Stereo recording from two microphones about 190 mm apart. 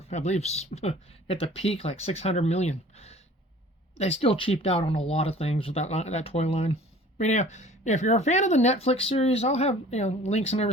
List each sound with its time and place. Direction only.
0.1 s speech: 35° left (ahead or behind)